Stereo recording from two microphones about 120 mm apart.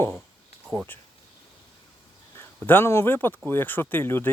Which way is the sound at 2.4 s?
20° left (ahead or behind).